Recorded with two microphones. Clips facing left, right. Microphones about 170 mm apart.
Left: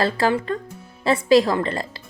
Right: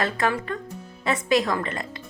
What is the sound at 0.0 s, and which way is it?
A woman's voice, 30° left (ahead or behind).